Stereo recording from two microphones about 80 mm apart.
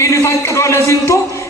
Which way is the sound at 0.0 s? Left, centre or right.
Left.